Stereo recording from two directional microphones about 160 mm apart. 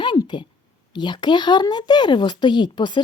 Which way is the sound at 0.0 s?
30° left (ahead or behind).